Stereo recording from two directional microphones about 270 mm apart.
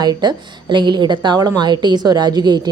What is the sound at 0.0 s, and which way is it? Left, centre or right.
A woman's voice, centre.